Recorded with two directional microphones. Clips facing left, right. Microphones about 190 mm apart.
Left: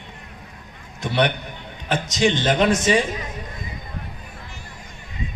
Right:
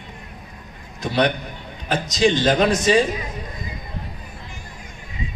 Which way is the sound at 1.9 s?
35° right (ahead or behind).